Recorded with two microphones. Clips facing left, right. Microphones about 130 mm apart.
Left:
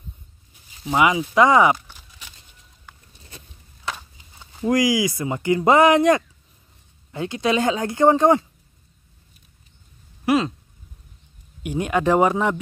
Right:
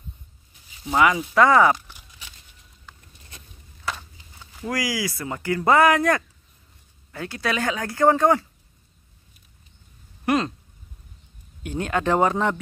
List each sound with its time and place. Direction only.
0.8 s speech: 15° left (ahead or behind)
3.9 s speech: 20° left (ahead or behind)
10.2 s a sound: 5° left (ahead or behind)
11.6 s speech: 10° left (ahead or behind)